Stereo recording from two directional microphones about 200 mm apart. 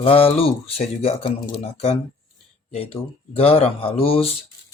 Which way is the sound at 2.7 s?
30° left (ahead or behind).